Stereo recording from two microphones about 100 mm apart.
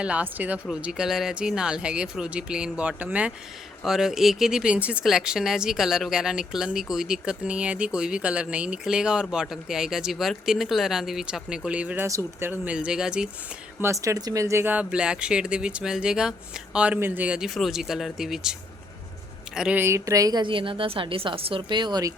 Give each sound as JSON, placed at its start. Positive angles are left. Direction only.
{"t": 0.0, "sound": "speech", "side_deg": -15}
{"t": 3.8, "sound": "speech", "side_deg": -5}
{"t": 12.0, "sound": "speech", "side_deg": -30}
{"t": 12.6, "sound": "speech", "side_deg": -10}
{"t": 14.0, "sound": "speech", "side_deg": -35}
{"t": 19.7, "sound": "speech", "side_deg": -25}
{"t": 20.4, "sound": "a woman's voice", "side_deg": -60}